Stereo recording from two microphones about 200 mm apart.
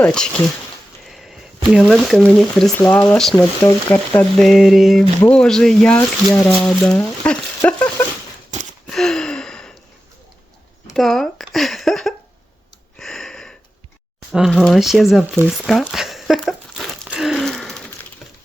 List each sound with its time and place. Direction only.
0.0 s speech: 5° left (ahead or behind)
1.0 s a sound: centre (ahead or behind)
1.6 s speech: centre (ahead or behind)
3.6 s speech: 15° left (ahead or behind)
8.5 s wheeze: 35° right (ahead or behind)
8.9 s gasp: centre (ahead or behind)
10.9 s speech: centre (ahead or behind)
13.0 s a sound: centre (ahead or behind)
14.3 s speech: centre (ahead or behind)
15.4 s crumpling: centre (ahead or behind)